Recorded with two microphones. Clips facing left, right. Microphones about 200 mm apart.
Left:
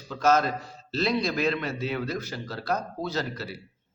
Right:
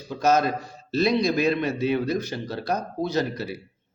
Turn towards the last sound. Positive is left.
turn(degrees=-15)  # may be behind; listen again after turning